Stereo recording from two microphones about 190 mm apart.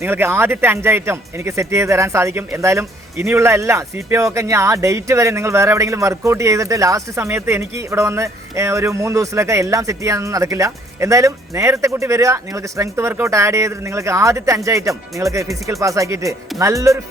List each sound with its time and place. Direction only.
0.0 s speech: 10° right (ahead or behind)